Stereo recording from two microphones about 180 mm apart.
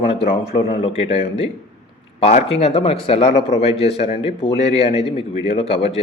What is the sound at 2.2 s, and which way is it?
Speech, 35° left (ahead or behind).